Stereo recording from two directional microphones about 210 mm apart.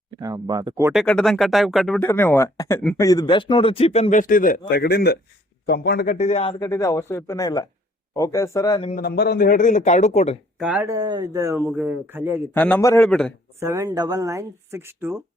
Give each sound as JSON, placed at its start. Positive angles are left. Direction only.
{"t": 0.2, "sound": "speech", "side_deg": -15}
{"t": 0.9, "sound": "speech", "side_deg": 5}
{"t": 6.1, "sound": "speech", "side_deg": 30}
{"t": 6.5, "sound": "speech", "side_deg": 15}
{"t": 8.9, "sound": "speech", "side_deg": 45}
{"t": 10.6, "sound": "speech", "side_deg": -5}
{"t": 12.5, "sound": "speech", "side_deg": 10}
{"t": 13.6, "sound": "speech", "side_deg": -10}